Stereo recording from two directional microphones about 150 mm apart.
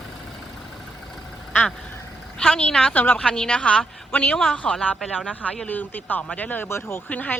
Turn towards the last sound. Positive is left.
turn(degrees=10)  # may be behind; listen again after turning